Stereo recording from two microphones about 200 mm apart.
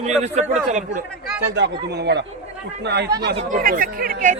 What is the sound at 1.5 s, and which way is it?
A man's voice, 55° right (ahead or behind).